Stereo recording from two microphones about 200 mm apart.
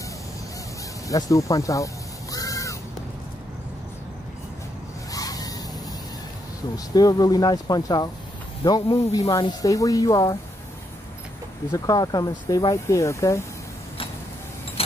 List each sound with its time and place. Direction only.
1.0 s speech: 15° left (ahead or behind)
2.3 s crow: 15° left (ahead or behind)
5.1 s vehicle: 20° left (ahead or behind)
6.9 s speech: 20° left (ahead or behind)
11.7 s speech: 20° left (ahead or behind)